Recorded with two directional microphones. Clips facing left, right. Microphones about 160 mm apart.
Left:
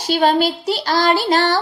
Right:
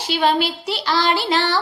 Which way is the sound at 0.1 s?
40° left (ahead or behind).